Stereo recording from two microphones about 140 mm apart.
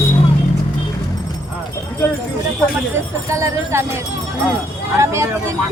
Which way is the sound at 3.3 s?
20° right (ahead or behind).